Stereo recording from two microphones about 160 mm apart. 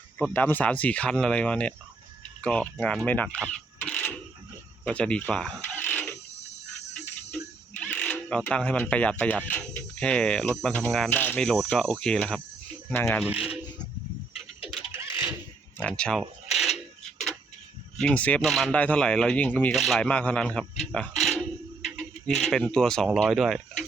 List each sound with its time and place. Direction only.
0.2 s speech: 10° left (ahead or behind)
3.3 s a sound: 5° left (ahead or behind)
4.9 s speech: 5° left (ahead or behind)
7.8 s speech: 10° left (ahead or behind)
13.2 s speech: 5° right (ahead or behind)
14.9 s a sound: 15° right (ahead or behind)
15.8 s a sound: 5° left (ahead or behind)
17.9 s speech: 5° left (ahead or behind)
22.4 s speech: 5° left (ahead or behind)